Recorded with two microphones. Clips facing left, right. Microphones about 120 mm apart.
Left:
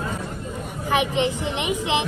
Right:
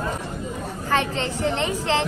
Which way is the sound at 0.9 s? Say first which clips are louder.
Left 2 dB; 15° left (ahead or behind).